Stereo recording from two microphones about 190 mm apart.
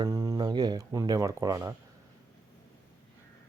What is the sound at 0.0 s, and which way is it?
Music, 15° right (ahead or behind).